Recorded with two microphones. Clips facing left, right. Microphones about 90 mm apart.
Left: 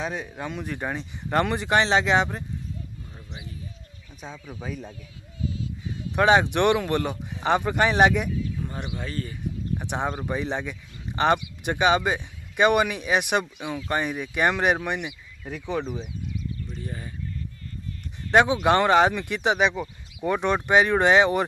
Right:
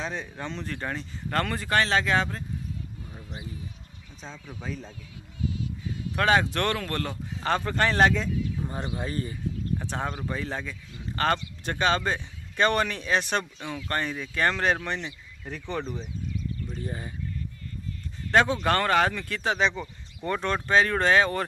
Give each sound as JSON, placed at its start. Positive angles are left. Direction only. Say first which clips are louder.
{"t": 0.0, "sound": "speech", "louder": "left 3 dB", "side_deg": 10}
{"t": 4.2, "sound": "speech", "louder": "left 3 dB", "side_deg": 10}
{"t": 6.1, "sound": "speech", "louder": "left 4 dB", "side_deg": 20}
{"t": 8.5, "sound": "a sound", "louder": "even", "side_deg": -20}
{"t": 8.9, "sound": "speech", "louder": "right 1 dB", "side_deg": -20}
{"t": 9.8, "sound": "speech", "louder": "left 3 dB", "side_deg": 15}
{"t": 16.3, "sound": "a sound", "louder": "right 1 dB", "side_deg": -40}
{"t": 16.8, "sound": "speech", "louder": "right 1 dB", "side_deg": -25}
{"t": 18.3, "sound": "speech", "louder": "left 4 dB", "side_deg": 15}